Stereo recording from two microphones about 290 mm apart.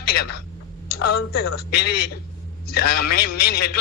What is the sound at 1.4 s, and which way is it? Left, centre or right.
A man's voice, left.